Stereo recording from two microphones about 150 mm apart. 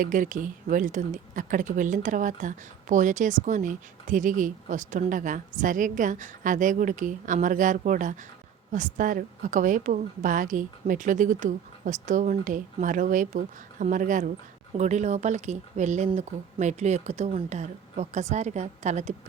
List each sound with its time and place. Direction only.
0.0 s speech: 60° right (ahead or behind)